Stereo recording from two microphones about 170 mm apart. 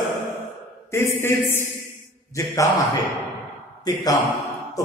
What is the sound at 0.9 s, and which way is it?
A man's voice, 15° left (ahead or behind).